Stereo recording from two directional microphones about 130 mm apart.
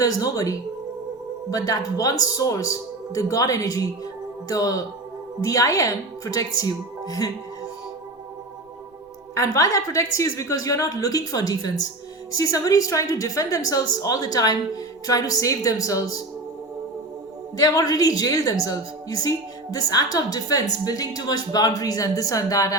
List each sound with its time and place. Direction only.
0.0 s a woman's voice: 25° left (ahead or behind)
9.3 s a woman's voice: 25° left (ahead or behind)
17.6 s a woman's voice: 30° left (ahead or behind)